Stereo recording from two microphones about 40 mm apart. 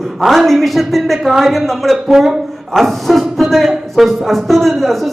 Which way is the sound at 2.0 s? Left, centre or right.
Centre.